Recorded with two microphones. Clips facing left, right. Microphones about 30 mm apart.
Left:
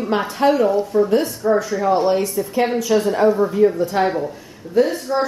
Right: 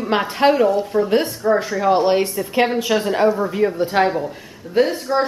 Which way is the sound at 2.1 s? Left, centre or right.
Right.